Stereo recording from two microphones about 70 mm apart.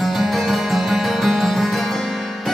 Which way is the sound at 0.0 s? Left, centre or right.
Centre.